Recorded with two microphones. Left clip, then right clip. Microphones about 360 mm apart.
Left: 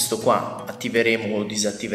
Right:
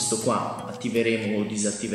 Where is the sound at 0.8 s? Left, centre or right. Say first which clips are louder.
Left 4 dB; centre.